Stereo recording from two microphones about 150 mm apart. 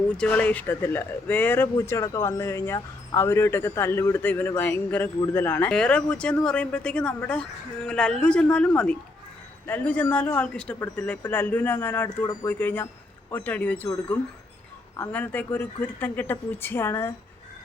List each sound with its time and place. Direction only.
0.2 s speech: 10° left (ahead or behind)